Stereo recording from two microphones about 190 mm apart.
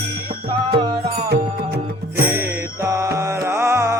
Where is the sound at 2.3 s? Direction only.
10° right (ahead or behind).